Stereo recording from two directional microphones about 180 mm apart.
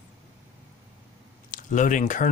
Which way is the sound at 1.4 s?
45° left (ahead or behind).